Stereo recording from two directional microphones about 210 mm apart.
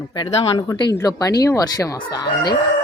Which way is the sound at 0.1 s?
25° left (ahead or behind).